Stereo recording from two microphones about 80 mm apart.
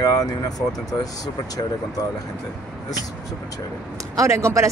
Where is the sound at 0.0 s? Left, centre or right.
Left.